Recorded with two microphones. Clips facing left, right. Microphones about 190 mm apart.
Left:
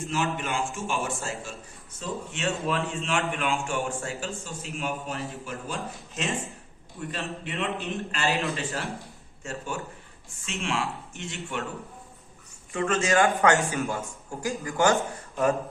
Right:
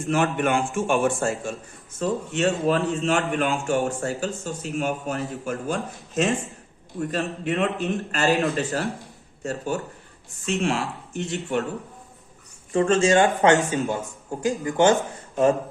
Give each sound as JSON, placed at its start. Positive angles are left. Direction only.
{"t": 0.1, "sound": "a man's voice", "side_deg": -55}
{"t": 12.7, "sound": "a man's voice", "side_deg": -30}